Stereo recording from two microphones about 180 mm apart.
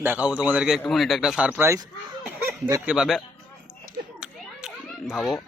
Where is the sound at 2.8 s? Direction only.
5° right (ahead or behind).